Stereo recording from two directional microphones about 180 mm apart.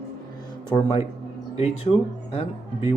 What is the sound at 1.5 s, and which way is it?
Speech, 35° left (ahead or behind).